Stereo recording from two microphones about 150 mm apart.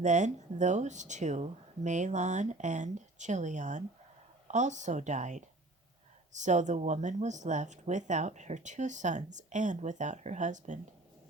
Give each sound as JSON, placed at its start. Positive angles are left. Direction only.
{"t": 0.0, "sound": "speech", "side_deg": -55}